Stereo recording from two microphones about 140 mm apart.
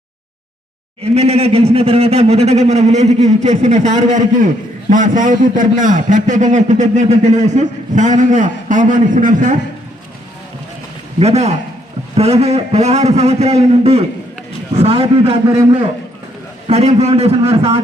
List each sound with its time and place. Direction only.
1.1 s a man's voice: 50° right (ahead or behind); by 9.6 s 65° right (ahead or behind)
11.2 s a man's voice: 50° right (ahead or behind)
16.6 s a man's voice: 50° right (ahead or behind)